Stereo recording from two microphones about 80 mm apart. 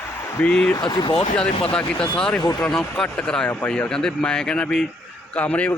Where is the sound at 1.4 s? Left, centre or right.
Centre.